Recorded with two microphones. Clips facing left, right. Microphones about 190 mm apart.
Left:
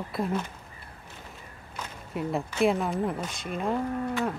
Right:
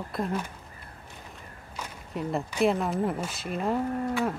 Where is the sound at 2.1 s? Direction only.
Centre (ahead or behind).